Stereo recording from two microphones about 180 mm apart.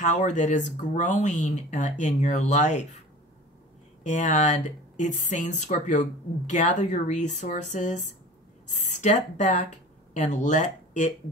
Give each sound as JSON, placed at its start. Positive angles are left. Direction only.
{"t": 0.0, "sound": "speech", "side_deg": 40}
{"t": 4.0, "sound": "speech", "side_deg": 45}